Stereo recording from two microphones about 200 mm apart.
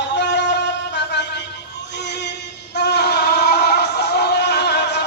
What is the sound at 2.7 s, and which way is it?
Music, 55° left (ahead or behind).